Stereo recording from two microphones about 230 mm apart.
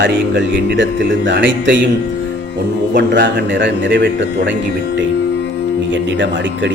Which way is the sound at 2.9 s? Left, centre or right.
Right.